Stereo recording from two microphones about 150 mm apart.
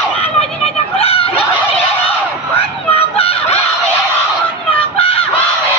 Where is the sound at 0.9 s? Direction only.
40° left (ahead or behind).